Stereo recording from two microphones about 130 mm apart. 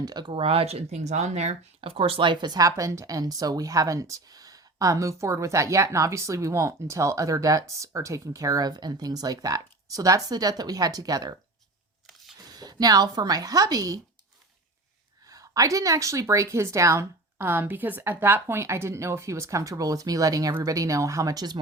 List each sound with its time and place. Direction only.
0.0 s speech: 30° right (ahead or behind)
12.4 s speech: 30° right (ahead or behind)
15.3 s speech: 25° right (ahead or behind)